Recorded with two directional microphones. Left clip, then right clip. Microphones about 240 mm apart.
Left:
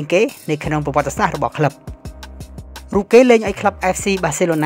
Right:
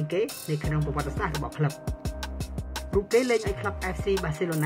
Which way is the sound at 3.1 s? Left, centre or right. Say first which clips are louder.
Left 15 dB; left.